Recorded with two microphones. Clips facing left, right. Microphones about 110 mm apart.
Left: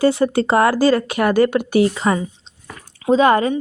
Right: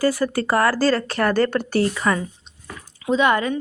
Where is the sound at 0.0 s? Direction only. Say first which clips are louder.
Left 5 dB; 25° left (ahead or behind).